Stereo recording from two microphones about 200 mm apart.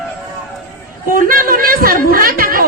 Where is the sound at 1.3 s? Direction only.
45° right (ahead or behind).